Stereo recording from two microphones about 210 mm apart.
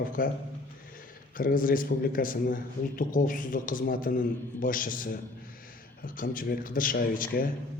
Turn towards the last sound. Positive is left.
turn(degrees=45)  # may be behind; listen again after turning